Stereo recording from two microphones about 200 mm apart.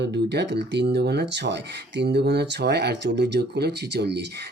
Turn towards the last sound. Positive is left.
turn(degrees=-55)  # may be behind; listen again after turning